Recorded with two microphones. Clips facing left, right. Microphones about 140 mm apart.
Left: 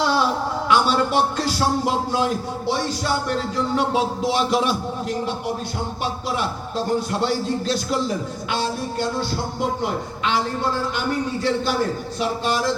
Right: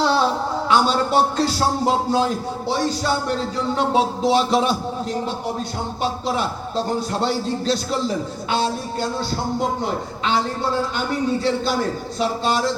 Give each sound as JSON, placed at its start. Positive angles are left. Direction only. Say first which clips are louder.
{"t": 0.0, "sound": "a sound", "louder": "right 2 dB", "side_deg": -30}
{"t": 0.7, "sound": "a man's voice", "louder": "right 1 dB", "side_deg": -35}
{"t": 12.2, "sound": "a man's voice", "louder": "right 2 dB", "side_deg": -30}